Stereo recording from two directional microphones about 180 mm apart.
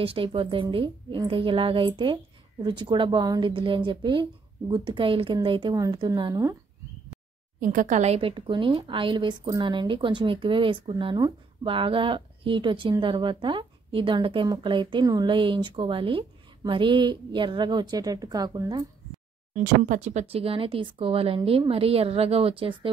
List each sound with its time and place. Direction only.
0.0 s a woman's voice: 30° right (ahead or behind)
7.6 s a woman's voice: 45° right (ahead or behind); by 18.9 s 20° right (ahead or behind)
19.5 s speech: 45° right (ahead or behind); by 22.8 s 30° right (ahead or behind)